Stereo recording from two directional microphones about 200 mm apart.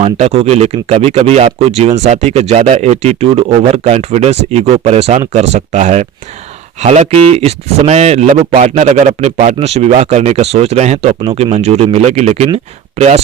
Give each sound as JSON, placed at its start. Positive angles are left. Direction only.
{"t": 0.0, "sound": "speech", "side_deg": -30}